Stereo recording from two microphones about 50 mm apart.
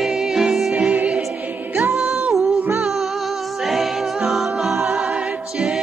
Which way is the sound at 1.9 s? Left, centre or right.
Centre.